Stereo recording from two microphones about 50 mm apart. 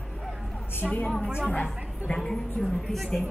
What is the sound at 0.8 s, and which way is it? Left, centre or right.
A woman's voice, left.